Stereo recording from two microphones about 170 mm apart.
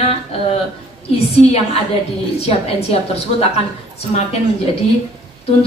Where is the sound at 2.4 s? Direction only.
40° left (ahead or behind).